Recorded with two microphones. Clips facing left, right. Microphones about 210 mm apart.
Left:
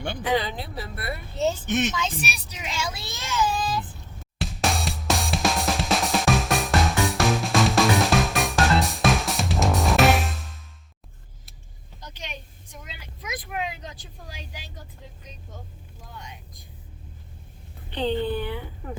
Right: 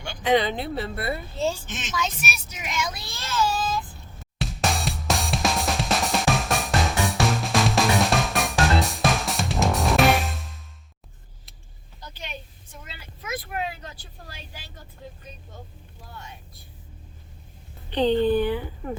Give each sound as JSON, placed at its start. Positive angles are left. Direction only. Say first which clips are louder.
{"t": 0.2, "sound": "speech", "louder": "right 5 dB", "side_deg": -25}
{"t": 1.4, "sound": "a woman's voice", "louder": "left 3 dB", "side_deg": 20}
{"t": 1.6, "sound": "speech", "louder": "left 13 dB", "side_deg": 60}
{"t": 2.0, "sound": "child singing", "louder": "even", "side_deg": 35}
{"t": 4.4, "sound": "drum kit", "louder": "even", "side_deg": 0}
{"t": 12.0, "sound": "vehicle", "louder": "right 1 dB", "side_deg": 10}
{"t": 16.1, "sound": "vehicle", "louder": "even", "side_deg": 15}